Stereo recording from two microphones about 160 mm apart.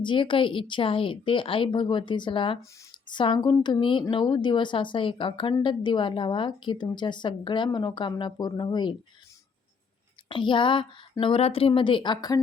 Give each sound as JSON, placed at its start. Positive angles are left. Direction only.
{"t": 0.0, "sound": "a woman's voice", "side_deg": 30}
{"t": 10.2, "sound": "a woman's voice", "side_deg": 30}